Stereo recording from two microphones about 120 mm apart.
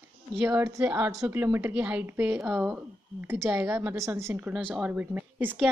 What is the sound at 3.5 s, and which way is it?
A woman's voice, 20° right (ahead or behind).